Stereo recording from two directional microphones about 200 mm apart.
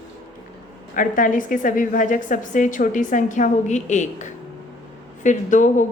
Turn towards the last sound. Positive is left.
turn(degrees=40)  # may be behind; listen again after turning